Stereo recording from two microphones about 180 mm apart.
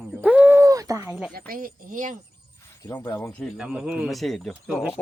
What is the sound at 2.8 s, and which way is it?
Speech, 15° left (ahead or behind).